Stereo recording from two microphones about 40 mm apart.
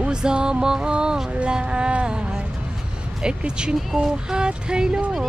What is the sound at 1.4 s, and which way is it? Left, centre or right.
Music, right.